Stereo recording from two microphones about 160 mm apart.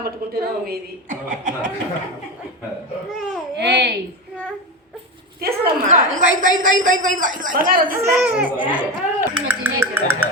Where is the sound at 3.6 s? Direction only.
90° right.